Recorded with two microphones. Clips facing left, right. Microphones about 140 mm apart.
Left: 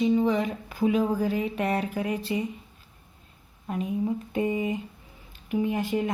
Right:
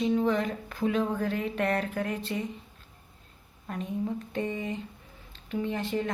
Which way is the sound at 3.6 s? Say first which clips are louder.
Left 4 dB; 10° left (ahead or behind).